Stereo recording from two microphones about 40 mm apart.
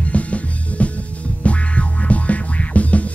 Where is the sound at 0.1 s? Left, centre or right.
Left.